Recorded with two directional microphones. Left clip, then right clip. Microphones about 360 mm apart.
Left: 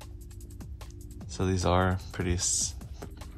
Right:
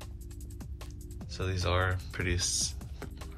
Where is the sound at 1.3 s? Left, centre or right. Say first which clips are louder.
Left 5 dB; centre.